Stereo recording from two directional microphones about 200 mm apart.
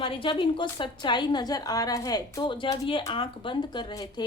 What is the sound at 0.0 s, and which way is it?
A woman's voice, 25° left (ahead or behind).